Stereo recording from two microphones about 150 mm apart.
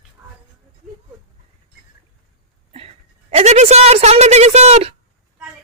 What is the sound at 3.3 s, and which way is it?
Speech, 50° right (ahead or behind).